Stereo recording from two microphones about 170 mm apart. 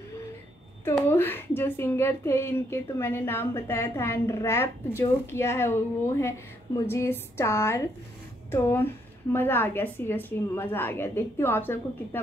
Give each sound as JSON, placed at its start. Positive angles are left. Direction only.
{"t": 1.0, "sound": "a woman's voice", "side_deg": 10}